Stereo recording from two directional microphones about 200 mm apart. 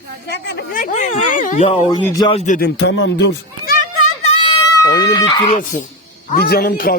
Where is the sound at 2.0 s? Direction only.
20° left (ahead or behind).